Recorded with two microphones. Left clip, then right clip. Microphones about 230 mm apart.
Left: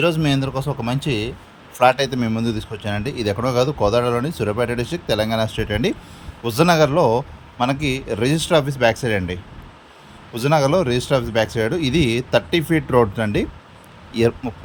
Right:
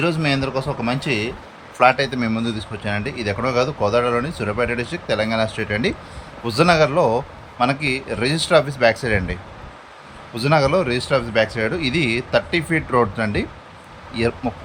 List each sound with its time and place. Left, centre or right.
0.0 s speech: left